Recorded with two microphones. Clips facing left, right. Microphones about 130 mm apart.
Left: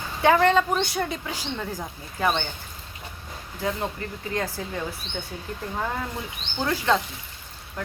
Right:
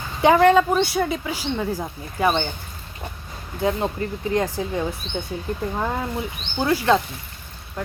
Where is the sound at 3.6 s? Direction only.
25° right (ahead or behind).